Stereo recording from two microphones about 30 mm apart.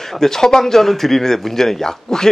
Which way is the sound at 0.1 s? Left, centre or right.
Centre.